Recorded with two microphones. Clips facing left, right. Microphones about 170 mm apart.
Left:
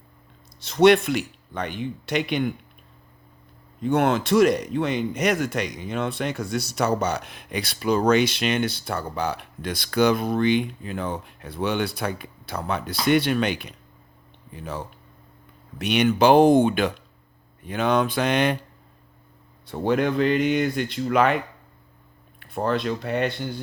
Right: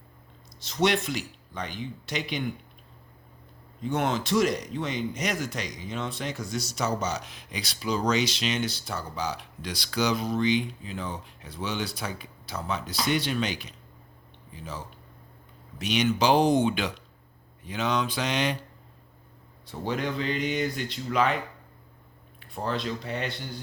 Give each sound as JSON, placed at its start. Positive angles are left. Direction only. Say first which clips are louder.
{"t": 0.6, "sound": "speech", "louder": "left 9 dB", "side_deg": 60}
{"t": 3.8, "sound": "speech", "louder": "left 6 dB", "side_deg": 60}
{"t": 19.6, "sound": "speech", "louder": "left 8 dB", "side_deg": 60}